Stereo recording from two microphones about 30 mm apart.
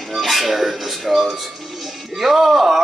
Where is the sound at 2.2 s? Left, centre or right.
Centre.